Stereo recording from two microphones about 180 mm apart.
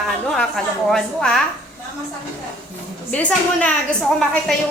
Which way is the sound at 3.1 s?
5° left (ahead or behind).